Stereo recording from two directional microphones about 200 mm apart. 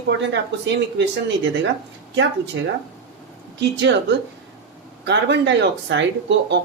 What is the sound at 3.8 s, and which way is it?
Speech, 60° right (ahead or behind).